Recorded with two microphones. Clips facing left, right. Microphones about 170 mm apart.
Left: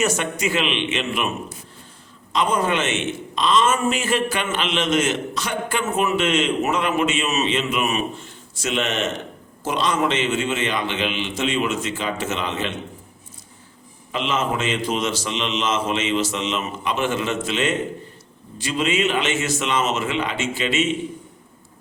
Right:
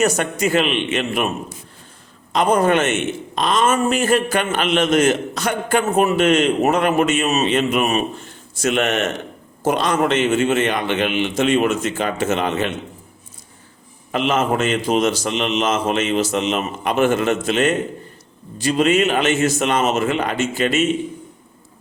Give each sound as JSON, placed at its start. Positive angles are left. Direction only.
{"t": 0.0, "sound": "a man's voice", "side_deg": -40}
{"t": 2.3, "sound": "a man's voice", "side_deg": -45}
{"t": 8.6, "sound": "a man's voice", "side_deg": -55}
{"t": 14.1, "sound": "a man's voice", "side_deg": -45}